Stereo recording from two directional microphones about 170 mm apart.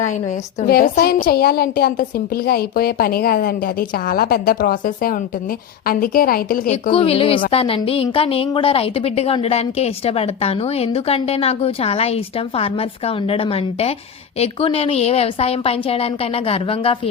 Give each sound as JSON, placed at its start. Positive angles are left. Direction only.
{"t": 0.6, "sound": "a woman's voice", "side_deg": 65}
{"t": 6.9, "sound": "a woman's voice", "side_deg": 35}